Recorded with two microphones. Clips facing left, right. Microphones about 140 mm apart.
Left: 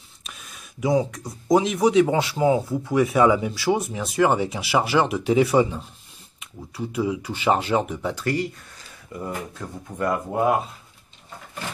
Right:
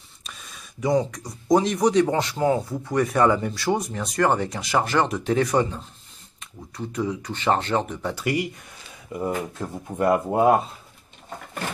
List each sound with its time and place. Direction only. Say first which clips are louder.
0.2 s speech: even; centre (ahead or behind)
8.1 s speech: right 1 dB; 10° right (ahead or behind)
9.1 s speech: right 4 dB; 20° right (ahead or behind)